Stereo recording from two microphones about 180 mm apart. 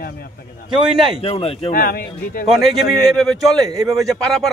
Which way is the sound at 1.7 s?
55° left (ahead or behind).